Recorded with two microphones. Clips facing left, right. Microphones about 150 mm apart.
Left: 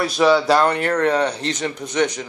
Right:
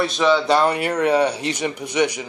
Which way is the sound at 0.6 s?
10° right (ahead or behind).